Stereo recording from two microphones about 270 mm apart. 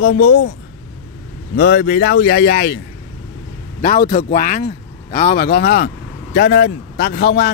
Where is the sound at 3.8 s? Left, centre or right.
Left.